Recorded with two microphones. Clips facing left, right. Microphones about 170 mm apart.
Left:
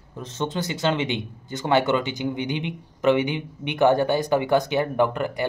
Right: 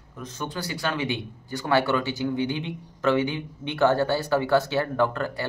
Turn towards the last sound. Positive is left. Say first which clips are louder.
# left 2 dB
turn(degrees=15)  # may be behind; listen again after turning